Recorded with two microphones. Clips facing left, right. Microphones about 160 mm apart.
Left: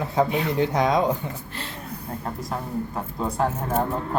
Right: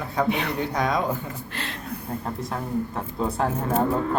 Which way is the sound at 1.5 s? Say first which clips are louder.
Right 2 dB; 80° right.